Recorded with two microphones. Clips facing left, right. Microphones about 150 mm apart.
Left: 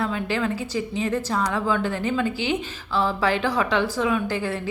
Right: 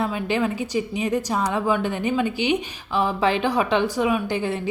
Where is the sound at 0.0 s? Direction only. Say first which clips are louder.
Right 2 dB; 20° right (ahead or behind).